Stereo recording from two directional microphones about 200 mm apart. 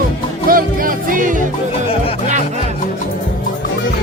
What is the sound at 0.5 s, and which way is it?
Music, 45° right (ahead or behind).